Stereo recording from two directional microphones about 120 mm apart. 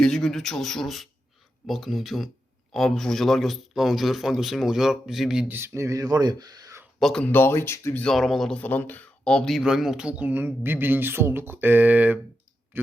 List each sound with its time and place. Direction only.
0.0 s speech: 5° left (ahead or behind)
5.5 s speech: 20° right (ahead or behind)
7.0 s speech: 5° left (ahead or behind)
7.3 s speech: 20° left (ahead or behind)
8.0 s speech: centre (ahead or behind); by 12.9 s 20° right (ahead or behind)